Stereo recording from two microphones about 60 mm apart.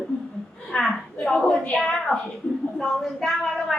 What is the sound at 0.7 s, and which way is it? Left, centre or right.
A woman's voice, centre.